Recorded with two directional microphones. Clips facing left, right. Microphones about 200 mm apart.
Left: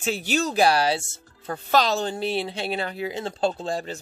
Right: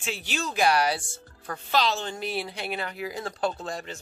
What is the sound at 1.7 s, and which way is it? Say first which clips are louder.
A woman's voice: left 4 dB; 45° left (ahead or behind).